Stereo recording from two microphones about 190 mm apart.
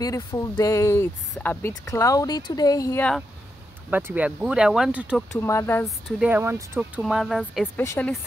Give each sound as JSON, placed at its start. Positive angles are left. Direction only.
{"t": 0.0, "sound": "speech", "side_deg": 20}
{"t": 3.9, "sound": "speech", "side_deg": -5}
{"t": 5.3, "sound": "speech", "side_deg": 15}
{"t": 5.9, "sound": "speech", "side_deg": 0}
{"t": 7.0, "sound": "speech", "side_deg": 0}
{"t": 7.7, "sound": "speech", "side_deg": 10}